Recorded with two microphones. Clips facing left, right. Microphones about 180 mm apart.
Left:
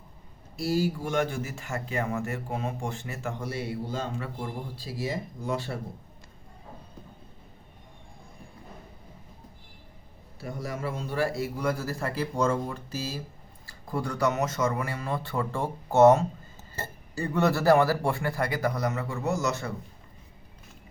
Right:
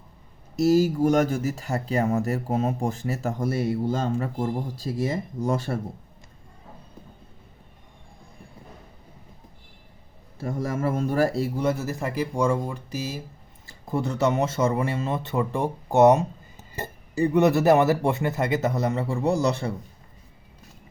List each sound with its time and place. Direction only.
0.6 s speech: 45° right (ahead or behind)
10.4 s speech: 50° right (ahead or behind); by 19.7 s 30° right (ahead or behind)